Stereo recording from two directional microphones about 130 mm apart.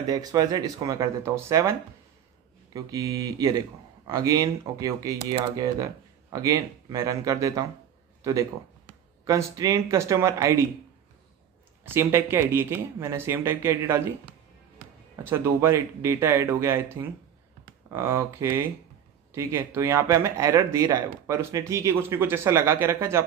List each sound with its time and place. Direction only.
0.0 s speech: 30° right (ahead or behind)
6.3 s speech: 25° right (ahead or behind)
11.8 s speech: 20° right (ahead or behind)
15.2 s speech: 20° right (ahead or behind)